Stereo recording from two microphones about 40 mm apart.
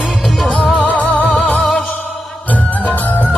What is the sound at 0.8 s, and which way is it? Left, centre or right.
Music, left.